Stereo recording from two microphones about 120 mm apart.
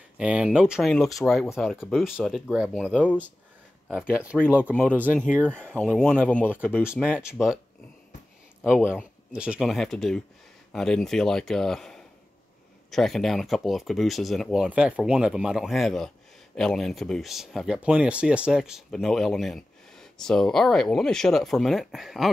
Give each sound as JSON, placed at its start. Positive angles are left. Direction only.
{"t": 0.2, "sound": "speech", "side_deg": -10}
{"t": 5.8, "sound": "speech", "side_deg": 10}
{"t": 6.5, "sound": "speech", "side_deg": -10}
{"t": 8.6, "sound": "speech", "side_deg": -5}